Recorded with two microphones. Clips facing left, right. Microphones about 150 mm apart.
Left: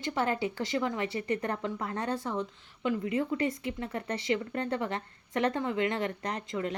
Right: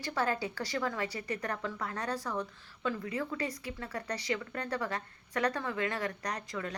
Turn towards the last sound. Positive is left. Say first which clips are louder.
# left 4 dB
turn(degrees=25)  # may be behind; listen again after turning